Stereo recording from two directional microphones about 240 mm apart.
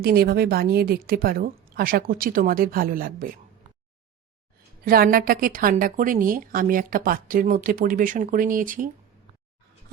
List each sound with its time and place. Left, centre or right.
0.0 s a woman's voice: right
4.9 s a woman's voice: right